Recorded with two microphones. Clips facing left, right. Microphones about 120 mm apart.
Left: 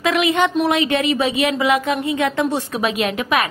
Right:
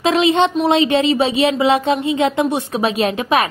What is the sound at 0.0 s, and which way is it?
A woman's voice, 25° right (ahead or behind).